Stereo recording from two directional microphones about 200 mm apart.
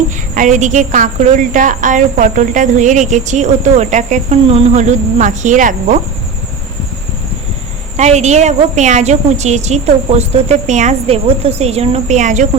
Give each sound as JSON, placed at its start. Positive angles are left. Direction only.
{"t": 0.3, "sound": "a woman's voice", "side_deg": -40}
{"t": 7.9, "sound": "a woman's voice", "side_deg": -35}